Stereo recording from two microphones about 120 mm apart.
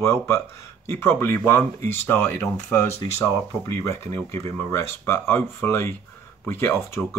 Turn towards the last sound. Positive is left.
turn(degrees=20)  # may be behind; listen again after turning